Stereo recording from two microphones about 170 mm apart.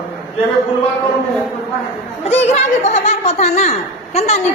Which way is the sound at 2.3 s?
40° left (ahead or behind).